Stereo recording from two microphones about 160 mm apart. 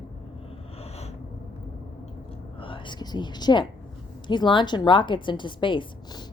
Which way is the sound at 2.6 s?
30° left (ahead or behind).